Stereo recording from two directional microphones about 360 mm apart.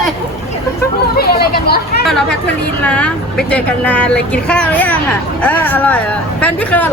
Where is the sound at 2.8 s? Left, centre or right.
Centre.